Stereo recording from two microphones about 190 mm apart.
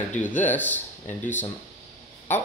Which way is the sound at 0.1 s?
10° left (ahead or behind).